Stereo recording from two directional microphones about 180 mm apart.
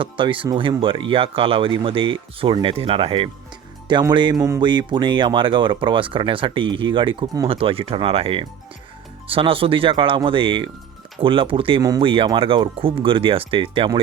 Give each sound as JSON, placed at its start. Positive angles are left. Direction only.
{"t": 0.0, "sound": "speech", "side_deg": -30}
{"t": 4.4, "sound": "speech", "side_deg": -15}
{"t": 4.6, "sound": "speech", "side_deg": -25}